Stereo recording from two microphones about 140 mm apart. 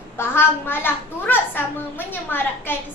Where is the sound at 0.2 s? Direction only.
15° left (ahead or behind).